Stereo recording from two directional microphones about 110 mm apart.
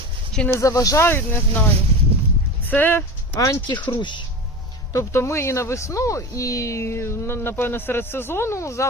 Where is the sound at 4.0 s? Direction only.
45° left (ahead or behind).